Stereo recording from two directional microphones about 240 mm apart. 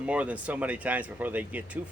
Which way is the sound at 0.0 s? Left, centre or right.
Centre.